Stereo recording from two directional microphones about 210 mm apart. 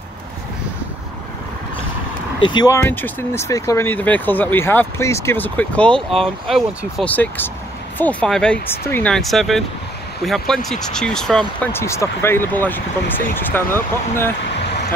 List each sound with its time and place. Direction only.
2.4 s speech: 20° left (ahead or behind)